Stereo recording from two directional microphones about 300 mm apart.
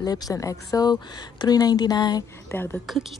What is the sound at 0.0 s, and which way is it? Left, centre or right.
Speech, centre.